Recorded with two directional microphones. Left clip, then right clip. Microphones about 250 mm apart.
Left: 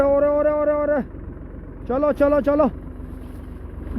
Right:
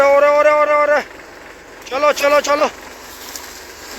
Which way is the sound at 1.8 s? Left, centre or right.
Centre.